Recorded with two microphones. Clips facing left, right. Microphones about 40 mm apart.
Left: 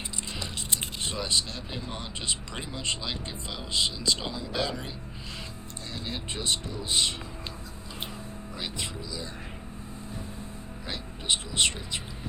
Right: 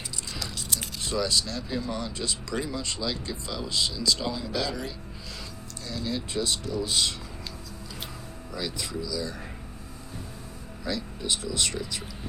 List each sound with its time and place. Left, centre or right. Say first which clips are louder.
0.3 s speech: right 1 dB; left
5.9 s speech: right 5 dB; left
8.5 s speech: right 4 dB; left
10.8 s speech: right 1 dB; left